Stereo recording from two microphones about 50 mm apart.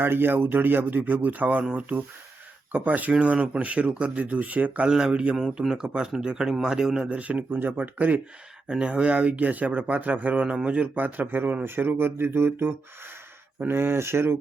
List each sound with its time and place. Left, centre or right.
0.0 s speech: right
3.1 s speech: right
4.9 s speech: centre
7.1 s speech: right
8.6 s speech: right
10.4 s speech: right